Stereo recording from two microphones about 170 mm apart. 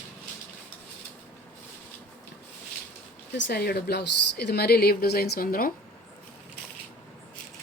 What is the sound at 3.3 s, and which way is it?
A woman's voice, 85° left.